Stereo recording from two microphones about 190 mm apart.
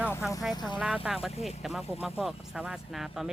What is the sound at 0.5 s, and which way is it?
Speech, 20° left (ahead or behind).